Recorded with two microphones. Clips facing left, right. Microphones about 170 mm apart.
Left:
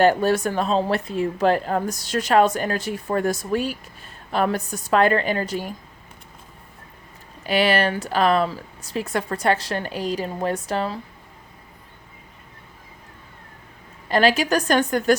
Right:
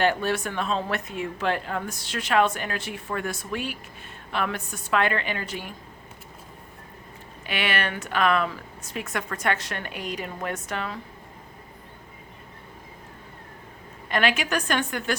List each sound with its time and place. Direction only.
0.0 s speech: 40° left (ahead or behind)
7.4 s speech: 35° left (ahead or behind)
14.1 s speech: 35° left (ahead or behind)